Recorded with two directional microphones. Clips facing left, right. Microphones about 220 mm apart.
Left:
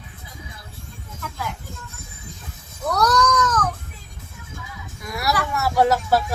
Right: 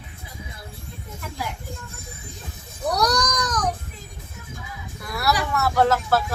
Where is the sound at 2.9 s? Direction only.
15° right (ahead or behind).